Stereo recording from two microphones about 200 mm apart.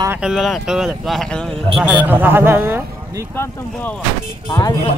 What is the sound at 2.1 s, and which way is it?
Speech, 10° right (ahead or behind).